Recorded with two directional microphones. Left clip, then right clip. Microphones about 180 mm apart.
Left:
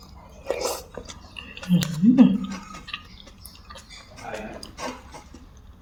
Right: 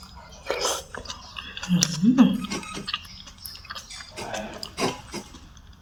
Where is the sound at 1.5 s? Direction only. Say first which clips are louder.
Right 2 dB; 25° left (ahead or behind).